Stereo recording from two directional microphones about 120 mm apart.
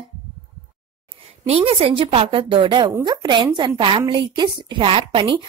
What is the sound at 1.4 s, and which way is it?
A woman's voice, 55° right (ahead or behind).